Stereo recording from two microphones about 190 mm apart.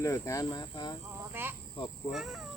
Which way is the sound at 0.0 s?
15° left (ahead or behind).